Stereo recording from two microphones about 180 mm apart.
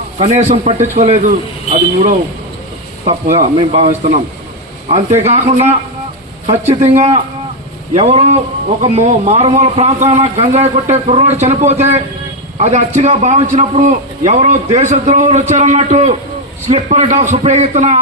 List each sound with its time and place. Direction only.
0.2 s a man's voice: 40° right (ahead or behind)
3.0 s a man's voice: 40° right (ahead or behind)